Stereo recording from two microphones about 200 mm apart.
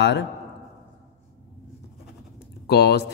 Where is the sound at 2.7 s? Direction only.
55° left (ahead or behind).